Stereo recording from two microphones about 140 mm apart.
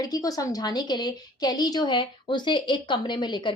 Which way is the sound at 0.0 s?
25° left (ahead or behind).